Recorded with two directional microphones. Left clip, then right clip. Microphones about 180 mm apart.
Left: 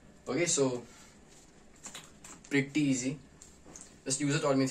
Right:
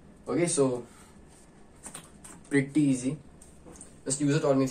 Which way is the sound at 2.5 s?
30° left (ahead or behind).